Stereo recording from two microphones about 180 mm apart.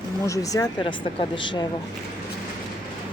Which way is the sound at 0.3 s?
20° left (ahead or behind).